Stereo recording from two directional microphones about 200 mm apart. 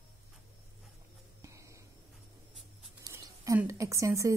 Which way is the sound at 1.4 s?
15° right (ahead or behind).